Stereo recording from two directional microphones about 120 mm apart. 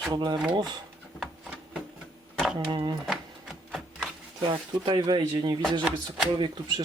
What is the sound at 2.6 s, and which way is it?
Speech, 40° right (ahead or behind).